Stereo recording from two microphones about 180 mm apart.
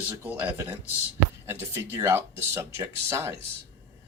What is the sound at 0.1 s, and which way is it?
Speech, 10° right (ahead or behind).